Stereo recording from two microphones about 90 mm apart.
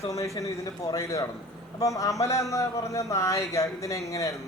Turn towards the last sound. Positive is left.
turn(degrees=40)  # may be behind; listen again after turning